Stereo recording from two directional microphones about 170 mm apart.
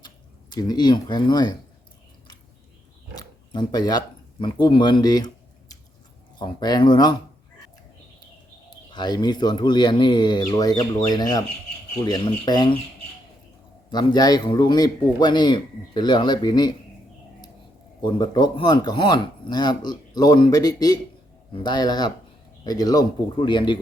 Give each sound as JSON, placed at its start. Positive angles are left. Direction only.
{"t": 0.5, "sound": "speech", "side_deg": 25}
{"t": 3.2, "sound": "speech", "side_deg": 25}
{"t": 8.9, "sound": "speech", "side_deg": 25}
{"t": 13.9, "sound": "speech", "side_deg": 25}
{"t": 18.0, "sound": "speech", "side_deg": 25}